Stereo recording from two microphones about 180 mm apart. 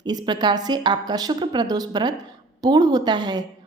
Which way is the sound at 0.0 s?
20° right (ahead or behind).